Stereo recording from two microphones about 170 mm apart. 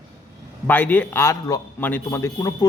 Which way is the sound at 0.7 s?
10° left (ahead or behind).